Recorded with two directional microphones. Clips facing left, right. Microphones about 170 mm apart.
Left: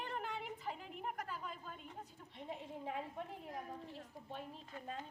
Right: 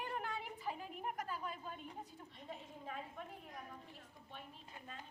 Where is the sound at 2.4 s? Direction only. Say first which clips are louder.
Left 5 dB; 25° left (ahead or behind).